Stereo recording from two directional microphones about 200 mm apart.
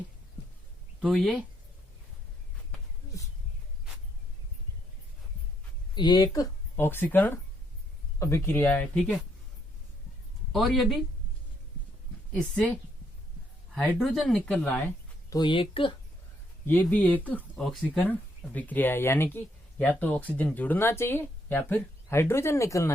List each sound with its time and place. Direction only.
0.9 s speech: centre (ahead or behind)
5.9 s speech: 20° left (ahead or behind); by 9.1 s 5° left (ahead or behind)
10.5 s speech: centre (ahead or behind)
13.8 s speech: centre (ahead or behind)
15.3 s speech: 20° left (ahead or behind)
16.6 s speech: 10° left (ahead or behind)